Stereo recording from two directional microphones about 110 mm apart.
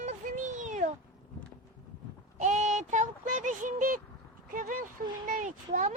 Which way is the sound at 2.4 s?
90° right.